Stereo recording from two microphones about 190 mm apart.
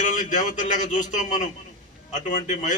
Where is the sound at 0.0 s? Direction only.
40° left (ahead or behind).